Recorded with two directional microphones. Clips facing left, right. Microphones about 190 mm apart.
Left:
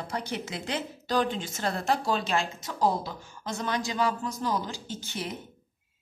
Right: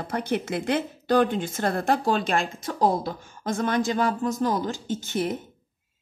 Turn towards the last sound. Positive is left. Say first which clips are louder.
# right 9 dB
turn(degrees=-50)  # may be behind; listen again after turning